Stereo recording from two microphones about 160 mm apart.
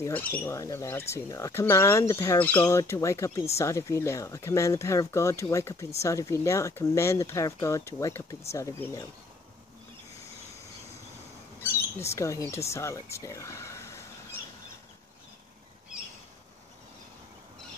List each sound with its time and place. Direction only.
0.1 s speech: 10° left (ahead or behind)
11.6 s speech: 15° left (ahead or behind)